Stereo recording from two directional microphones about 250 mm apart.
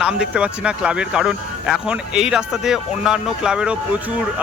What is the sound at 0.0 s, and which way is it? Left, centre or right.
Speech, centre.